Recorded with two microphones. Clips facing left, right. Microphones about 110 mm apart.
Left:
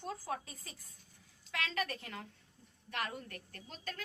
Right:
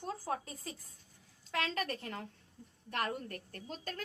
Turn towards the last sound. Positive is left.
turn(degrees=-40)  # may be behind; listen again after turning